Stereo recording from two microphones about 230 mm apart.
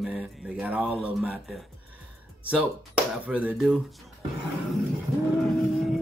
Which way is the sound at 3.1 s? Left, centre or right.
Centre.